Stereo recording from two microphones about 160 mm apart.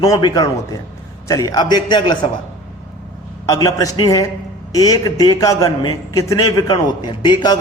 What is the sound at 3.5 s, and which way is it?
A man's voice, 20° left (ahead or behind).